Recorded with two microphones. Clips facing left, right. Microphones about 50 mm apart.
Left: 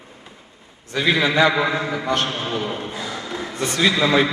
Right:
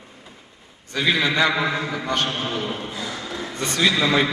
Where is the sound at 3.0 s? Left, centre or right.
Centre.